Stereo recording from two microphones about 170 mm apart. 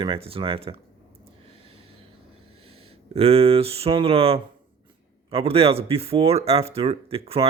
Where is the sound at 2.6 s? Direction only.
35° right (ahead or behind).